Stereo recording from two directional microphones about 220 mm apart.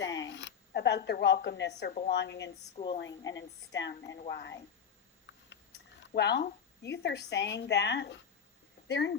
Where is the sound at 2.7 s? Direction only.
25° left (ahead or behind).